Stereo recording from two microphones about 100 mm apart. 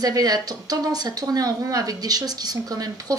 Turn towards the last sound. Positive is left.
turn(degrees=-40)  # may be behind; listen again after turning